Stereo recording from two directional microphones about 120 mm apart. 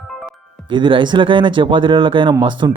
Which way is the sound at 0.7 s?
45° right (ahead or behind).